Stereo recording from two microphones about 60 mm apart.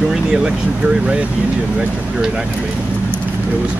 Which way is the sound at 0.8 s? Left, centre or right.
Centre.